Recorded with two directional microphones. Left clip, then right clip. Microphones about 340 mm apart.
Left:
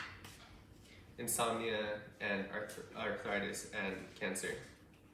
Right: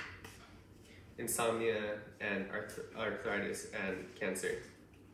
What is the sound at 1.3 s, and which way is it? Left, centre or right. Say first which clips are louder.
Speech: right 2 dB; centre.